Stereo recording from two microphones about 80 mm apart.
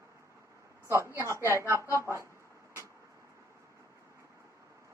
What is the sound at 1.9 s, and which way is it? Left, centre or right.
Speech, right.